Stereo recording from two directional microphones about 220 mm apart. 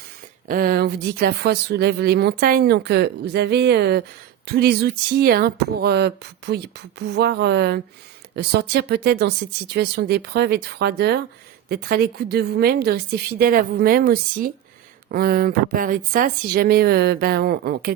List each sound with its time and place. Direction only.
0.4 s speech: 40° right (ahead or behind)